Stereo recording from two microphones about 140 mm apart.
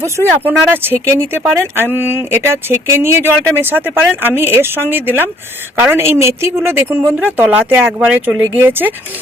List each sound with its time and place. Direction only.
0.4 s speech: 15° right (ahead or behind)